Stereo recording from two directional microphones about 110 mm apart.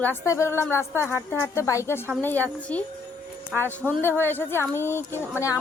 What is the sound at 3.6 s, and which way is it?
A woman's voice, 15° left (ahead or behind).